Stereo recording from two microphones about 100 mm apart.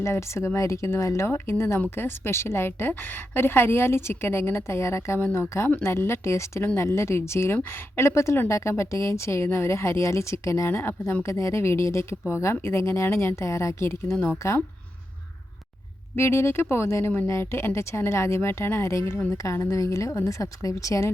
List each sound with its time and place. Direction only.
0.0 s speech: 30° left (ahead or behind)
16.1 s a woman's voice: 25° left (ahead or behind)